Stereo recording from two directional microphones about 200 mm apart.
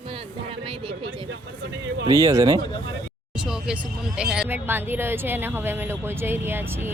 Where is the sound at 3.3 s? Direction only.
5° right (ahead or behind).